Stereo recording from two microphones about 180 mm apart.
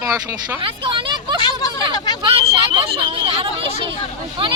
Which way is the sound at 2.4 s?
30° right (ahead or behind).